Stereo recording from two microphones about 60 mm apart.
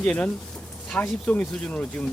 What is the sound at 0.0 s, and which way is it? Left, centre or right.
Speech, left.